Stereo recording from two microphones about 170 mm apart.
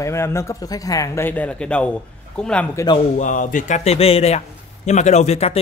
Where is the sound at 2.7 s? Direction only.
25° left (ahead or behind).